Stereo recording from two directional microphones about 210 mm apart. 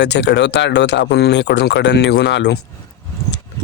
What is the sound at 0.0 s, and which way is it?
A man's voice, 55° left (ahead or behind).